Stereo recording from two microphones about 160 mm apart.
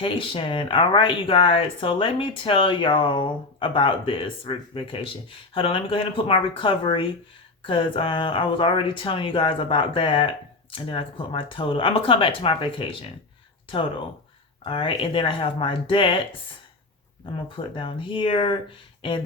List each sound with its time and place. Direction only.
0.0 s speech: 35° left (ahead or behind)
14.6 s speech: 35° left (ahead or behind)
17.3 s speech: 30° left (ahead or behind)